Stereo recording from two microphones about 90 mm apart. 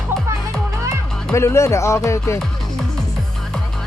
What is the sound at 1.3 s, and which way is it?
Speech, 30° left (ahead or behind).